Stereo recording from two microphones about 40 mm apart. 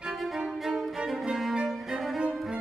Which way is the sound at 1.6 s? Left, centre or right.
Centre.